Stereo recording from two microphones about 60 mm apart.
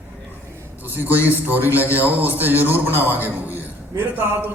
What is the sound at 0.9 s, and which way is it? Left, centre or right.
A man's voice, right.